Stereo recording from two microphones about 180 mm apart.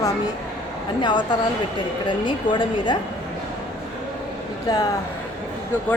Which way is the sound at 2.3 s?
25° left (ahead or behind).